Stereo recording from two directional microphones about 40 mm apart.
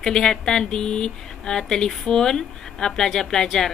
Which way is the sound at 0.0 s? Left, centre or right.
Centre.